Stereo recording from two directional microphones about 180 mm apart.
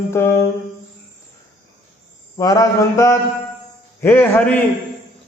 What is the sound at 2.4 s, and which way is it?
Mantra, 20° left (ahead or behind).